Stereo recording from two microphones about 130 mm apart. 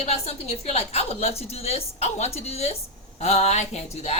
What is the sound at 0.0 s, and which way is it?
A woman's voice, 55° left (ahead or behind).